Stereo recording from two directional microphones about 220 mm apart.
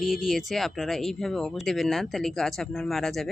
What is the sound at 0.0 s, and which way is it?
Speech, centre (ahead or behind).